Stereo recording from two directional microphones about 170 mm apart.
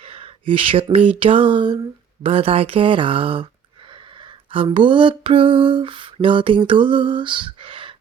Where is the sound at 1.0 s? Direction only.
30° right (ahead or behind).